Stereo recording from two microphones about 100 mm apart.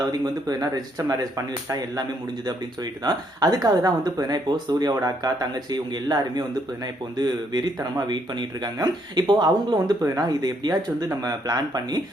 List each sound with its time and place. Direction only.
0.0 s speech: 40° right (ahead or behind)